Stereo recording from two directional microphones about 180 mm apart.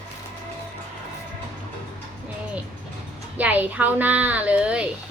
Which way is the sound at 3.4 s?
10° right (ahead or behind).